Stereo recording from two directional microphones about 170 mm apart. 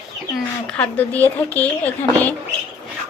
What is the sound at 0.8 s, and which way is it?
Speech, 10° left (ahead or behind).